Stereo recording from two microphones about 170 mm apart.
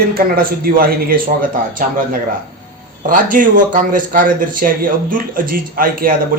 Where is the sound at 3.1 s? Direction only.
50° right (ahead or behind).